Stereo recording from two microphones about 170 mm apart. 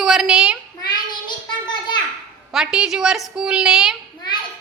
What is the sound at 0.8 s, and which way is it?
Child singing, 25° left (ahead or behind).